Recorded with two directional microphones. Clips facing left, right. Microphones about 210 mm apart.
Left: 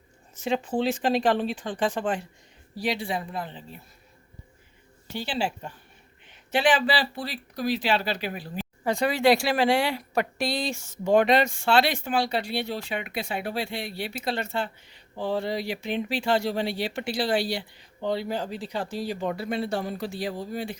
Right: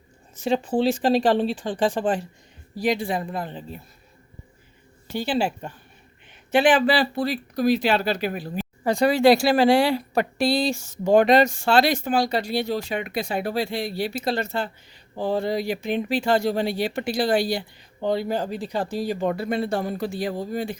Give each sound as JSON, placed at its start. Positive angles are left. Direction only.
{"t": 0.4, "sound": "speech", "side_deg": -35}
{"t": 2.8, "sound": "speech", "side_deg": -45}
{"t": 5.1, "sound": "speech", "side_deg": -50}